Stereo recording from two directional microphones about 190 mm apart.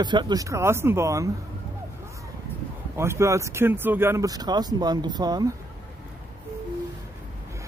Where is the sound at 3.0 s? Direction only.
15° right (ahead or behind).